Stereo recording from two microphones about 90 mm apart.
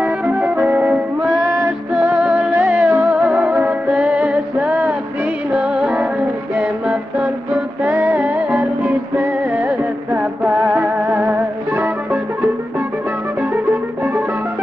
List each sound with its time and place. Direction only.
0.0 s organ: 15° right (ahead or behind)
2.0 s music: 15° right (ahead or behind)